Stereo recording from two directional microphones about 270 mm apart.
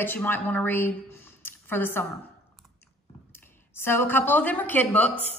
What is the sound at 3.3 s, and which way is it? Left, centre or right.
A woman's voice, centre.